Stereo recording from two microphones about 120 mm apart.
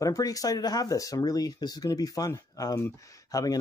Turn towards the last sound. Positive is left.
turn(degrees=30)  # may be behind; listen again after turning